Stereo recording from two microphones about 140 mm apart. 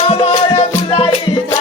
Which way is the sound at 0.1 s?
40° left (ahead or behind).